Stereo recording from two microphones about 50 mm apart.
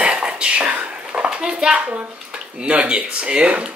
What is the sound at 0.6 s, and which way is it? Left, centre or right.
Whispering, right.